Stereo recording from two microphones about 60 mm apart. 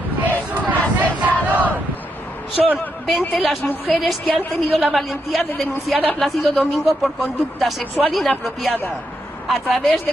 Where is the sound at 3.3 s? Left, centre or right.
Centre.